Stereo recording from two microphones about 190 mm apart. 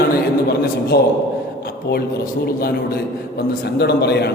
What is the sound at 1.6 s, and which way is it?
A man's voice, 55° left (ahead or behind).